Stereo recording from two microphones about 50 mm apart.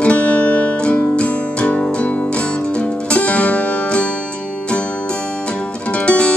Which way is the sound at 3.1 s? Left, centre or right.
Left.